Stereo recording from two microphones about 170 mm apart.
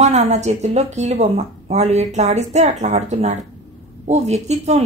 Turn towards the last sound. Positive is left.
turn(degrees=-40)  # may be behind; listen again after turning